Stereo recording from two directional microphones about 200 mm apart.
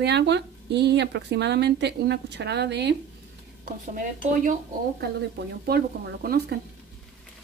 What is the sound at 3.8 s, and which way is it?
Speech, 40° right (ahead or behind).